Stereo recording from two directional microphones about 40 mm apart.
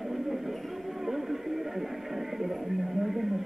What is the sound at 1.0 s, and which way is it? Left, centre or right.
Music, centre.